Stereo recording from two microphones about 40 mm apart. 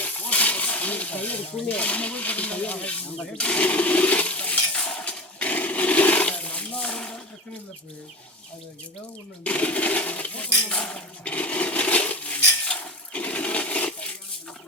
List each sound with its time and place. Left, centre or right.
0.0 s speech: left
5.5 s a sound: left
9.4 s speech: left
12.6 s coin: left